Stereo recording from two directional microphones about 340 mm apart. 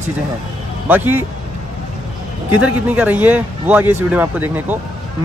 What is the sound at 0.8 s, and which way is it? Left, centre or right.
Speech, centre.